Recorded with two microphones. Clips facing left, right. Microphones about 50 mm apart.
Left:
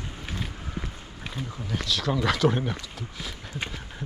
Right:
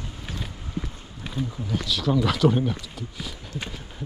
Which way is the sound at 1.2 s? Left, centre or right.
Centre.